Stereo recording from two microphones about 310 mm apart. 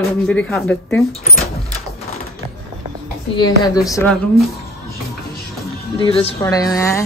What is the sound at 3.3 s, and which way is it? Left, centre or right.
Speech, centre.